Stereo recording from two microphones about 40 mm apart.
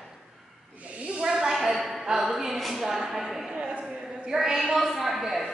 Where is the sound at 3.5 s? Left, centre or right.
Centre.